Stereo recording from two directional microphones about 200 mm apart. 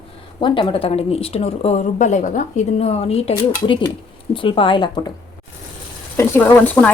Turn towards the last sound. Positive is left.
turn(degrees=10)  # may be behind; listen again after turning